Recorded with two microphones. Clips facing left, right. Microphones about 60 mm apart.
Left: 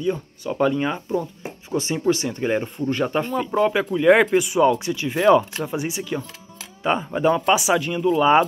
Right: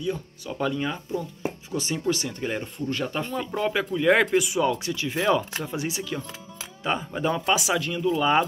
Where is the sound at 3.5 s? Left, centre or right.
Left.